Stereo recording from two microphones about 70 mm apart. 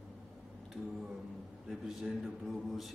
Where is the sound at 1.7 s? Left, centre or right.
Centre.